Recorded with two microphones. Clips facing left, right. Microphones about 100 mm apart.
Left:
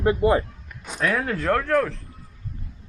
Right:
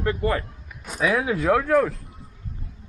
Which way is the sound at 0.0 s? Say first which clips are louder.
Left 5 dB; 20° left (ahead or behind).